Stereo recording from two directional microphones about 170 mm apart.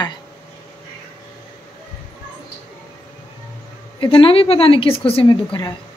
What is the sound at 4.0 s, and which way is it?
A woman's voice, 30° left (ahead or behind).